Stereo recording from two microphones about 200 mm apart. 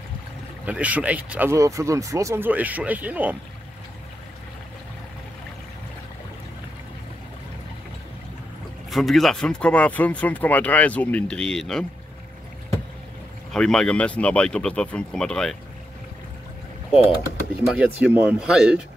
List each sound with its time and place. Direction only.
0.7 s speech: 5° right (ahead or behind)
8.9 s speech: centre (ahead or behind)
13.5 s speech: 5° left (ahead or behind)
17.6 s speech: 5° right (ahead or behind)